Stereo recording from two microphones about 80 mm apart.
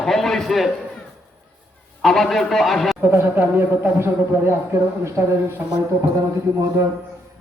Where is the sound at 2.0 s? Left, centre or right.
Centre.